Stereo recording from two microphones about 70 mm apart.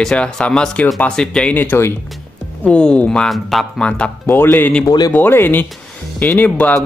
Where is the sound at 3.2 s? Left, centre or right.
Centre.